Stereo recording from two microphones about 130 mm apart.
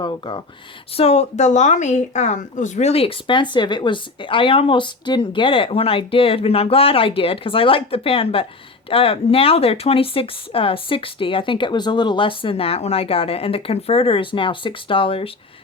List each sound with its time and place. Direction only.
0.0 s speech: 35° left (ahead or behind)
0.9 s a woman's voice: 50° left (ahead or behind)